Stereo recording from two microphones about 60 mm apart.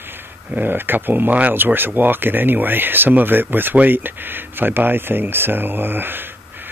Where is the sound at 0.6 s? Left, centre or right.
Right.